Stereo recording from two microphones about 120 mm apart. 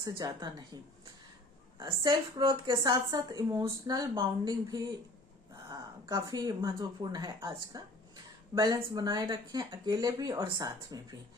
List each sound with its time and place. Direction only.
0.2 s speech: 35° right (ahead or behind)
1.8 s speech: 40° right (ahead or behind)